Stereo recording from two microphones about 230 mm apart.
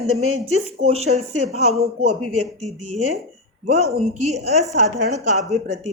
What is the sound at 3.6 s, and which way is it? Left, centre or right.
Speech, right.